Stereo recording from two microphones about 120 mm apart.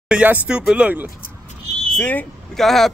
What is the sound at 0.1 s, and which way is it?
Speech, 10° right (ahead or behind).